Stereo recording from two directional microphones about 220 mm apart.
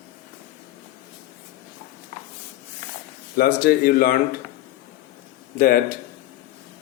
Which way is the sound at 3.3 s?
40° left (ahead or behind).